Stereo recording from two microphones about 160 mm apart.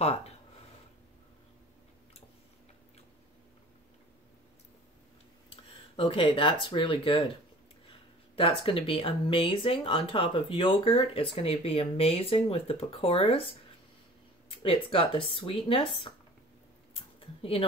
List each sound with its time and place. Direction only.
0.0 s speech: 40° left (ahead or behind)
5.5 s speech: 35° left (ahead or behind)
8.6 s speech: 35° left (ahead or behind)
14.6 s speech: 35° left (ahead or behind)
17.2 s a sound: 35° left (ahead or behind)